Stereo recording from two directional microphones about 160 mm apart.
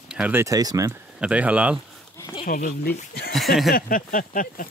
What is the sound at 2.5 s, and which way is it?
Speech, 55° left (ahead or behind).